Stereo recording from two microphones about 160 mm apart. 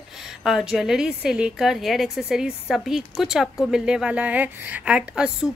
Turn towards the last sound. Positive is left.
turn(degrees=-5)  # may be behind; listen again after turning